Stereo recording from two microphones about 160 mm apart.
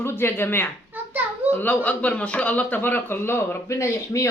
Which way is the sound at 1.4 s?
10° left (ahead or behind).